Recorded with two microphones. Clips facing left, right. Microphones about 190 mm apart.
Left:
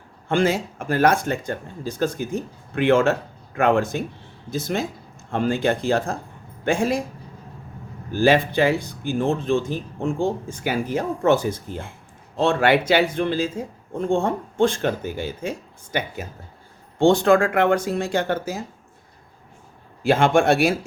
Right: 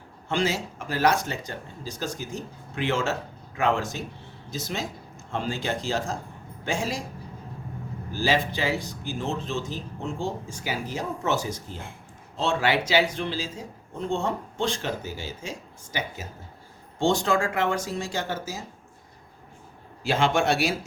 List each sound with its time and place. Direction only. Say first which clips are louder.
0.3 s speech: left 6 dB; 55° left (ahead or behind)
8.1 s speech: left 8 dB; 55° left (ahead or behind)
20.0 s speech: left 6 dB; 55° left (ahead or behind)